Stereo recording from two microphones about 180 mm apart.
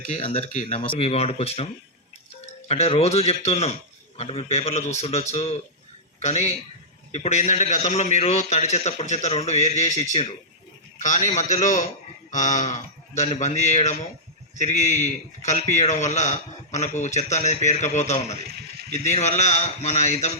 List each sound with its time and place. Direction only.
0.5 s a man's voice: 45° left (ahead or behind)
0.9 s a man's voice: 35° left (ahead or behind)
2.6 s a man's voice: 35° left (ahead or behind)